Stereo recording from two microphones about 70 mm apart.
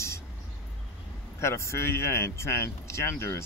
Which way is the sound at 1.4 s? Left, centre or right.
Left.